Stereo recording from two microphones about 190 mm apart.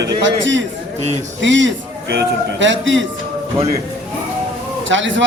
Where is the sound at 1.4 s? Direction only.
75° right (ahead or behind).